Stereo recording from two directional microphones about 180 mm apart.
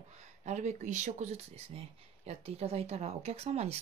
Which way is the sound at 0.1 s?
40° right (ahead or behind).